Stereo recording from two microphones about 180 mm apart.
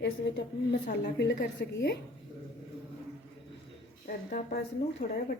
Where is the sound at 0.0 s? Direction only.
75° left (ahead or behind).